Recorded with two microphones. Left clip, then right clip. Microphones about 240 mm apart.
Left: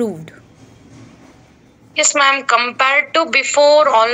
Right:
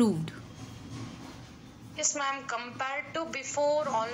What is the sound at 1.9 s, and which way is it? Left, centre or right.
A woman's voice, left.